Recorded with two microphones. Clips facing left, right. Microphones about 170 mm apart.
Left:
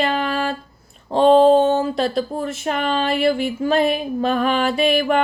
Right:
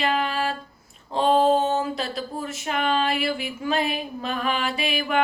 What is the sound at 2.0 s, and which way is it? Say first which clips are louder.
Speech: left 8 dB; 45° left (ahead or behind).